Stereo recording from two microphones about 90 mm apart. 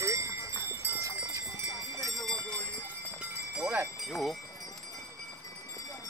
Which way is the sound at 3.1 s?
10° right (ahead or behind).